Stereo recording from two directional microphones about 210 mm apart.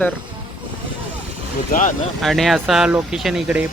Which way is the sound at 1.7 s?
45° left (ahead or behind).